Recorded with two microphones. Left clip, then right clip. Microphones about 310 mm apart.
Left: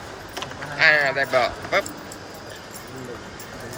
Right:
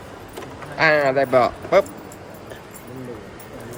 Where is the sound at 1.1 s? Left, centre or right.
Right.